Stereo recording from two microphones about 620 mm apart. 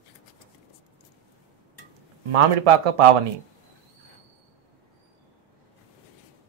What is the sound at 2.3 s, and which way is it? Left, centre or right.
Speech, right.